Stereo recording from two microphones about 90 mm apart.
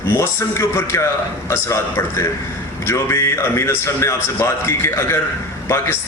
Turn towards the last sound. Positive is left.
turn(degrees=30)  # may be behind; listen again after turning